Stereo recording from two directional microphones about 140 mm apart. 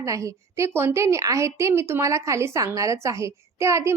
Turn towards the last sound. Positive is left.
turn(degrees=-20)  # may be behind; listen again after turning